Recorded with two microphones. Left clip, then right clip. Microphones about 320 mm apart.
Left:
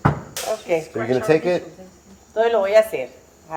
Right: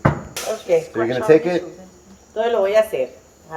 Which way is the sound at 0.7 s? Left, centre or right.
Left.